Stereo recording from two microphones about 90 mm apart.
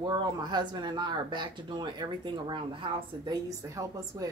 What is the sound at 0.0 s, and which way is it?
Speech, 50° right (ahead or behind).